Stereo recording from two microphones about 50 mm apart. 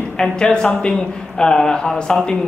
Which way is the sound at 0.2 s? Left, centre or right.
Centre.